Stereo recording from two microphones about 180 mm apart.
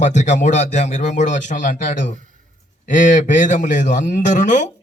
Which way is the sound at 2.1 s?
45° right (ahead or behind).